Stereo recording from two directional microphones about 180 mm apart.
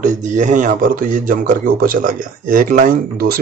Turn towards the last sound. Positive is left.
turn(degrees=-50)  # may be behind; listen again after turning